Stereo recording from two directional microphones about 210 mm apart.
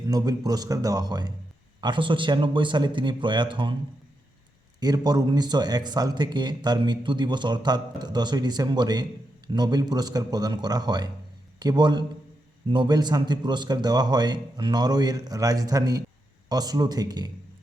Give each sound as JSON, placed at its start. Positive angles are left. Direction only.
{"t": 0.1, "sound": "a man's voice", "side_deg": -20}
{"t": 4.8, "sound": "a man's voice", "side_deg": -20}